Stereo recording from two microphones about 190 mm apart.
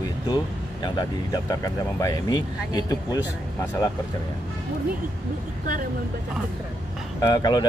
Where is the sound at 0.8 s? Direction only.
20° left (ahead or behind).